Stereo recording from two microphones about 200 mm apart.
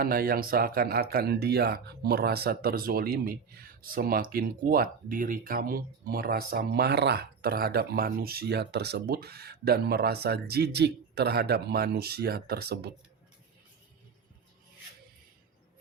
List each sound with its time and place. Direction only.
0.0 s speech: 45° right (ahead or behind)